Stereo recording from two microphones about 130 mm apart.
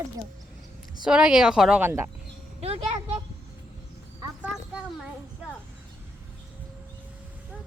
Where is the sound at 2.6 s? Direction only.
50° right (ahead or behind).